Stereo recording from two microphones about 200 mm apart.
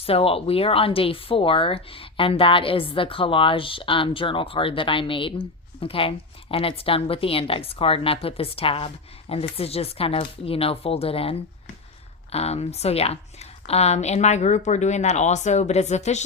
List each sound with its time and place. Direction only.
0.0 s speech: 30° left (ahead or behind)